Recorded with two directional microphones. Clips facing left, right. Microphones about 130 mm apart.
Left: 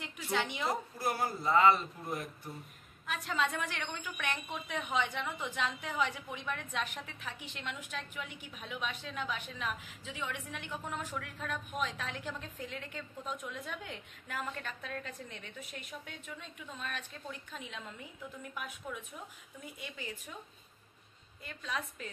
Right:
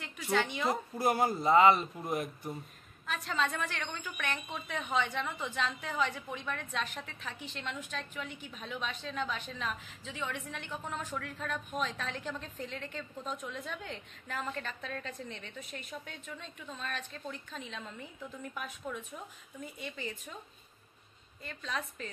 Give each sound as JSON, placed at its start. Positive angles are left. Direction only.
{"t": 0.0, "sound": "a woman's voice", "side_deg": 15}
{"t": 0.9, "sound": "speech", "side_deg": -20}
{"t": 3.1, "sound": "a woman's voice", "side_deg": 10}
{"t": 18.9, "sound": "a woman's voice", "side_deg": 5}
{"t": 21.5, "sound": "a woman's voice", "side_deg": 10}